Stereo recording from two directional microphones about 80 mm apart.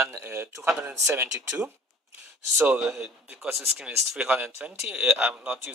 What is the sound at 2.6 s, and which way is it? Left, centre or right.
Speech, centre.